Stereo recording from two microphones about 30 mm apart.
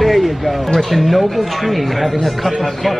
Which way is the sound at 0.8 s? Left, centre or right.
Centre.